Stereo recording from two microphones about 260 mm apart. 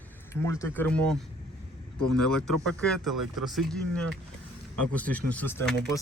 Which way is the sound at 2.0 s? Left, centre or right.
Right.